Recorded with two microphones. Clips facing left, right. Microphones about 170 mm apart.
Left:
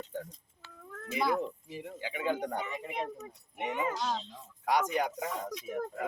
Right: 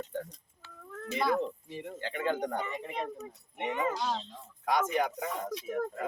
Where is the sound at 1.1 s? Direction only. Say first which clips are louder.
Right 1 dB; 5° left (ahead or behind).